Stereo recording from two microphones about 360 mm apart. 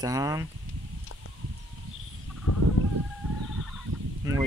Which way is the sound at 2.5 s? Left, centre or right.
Left.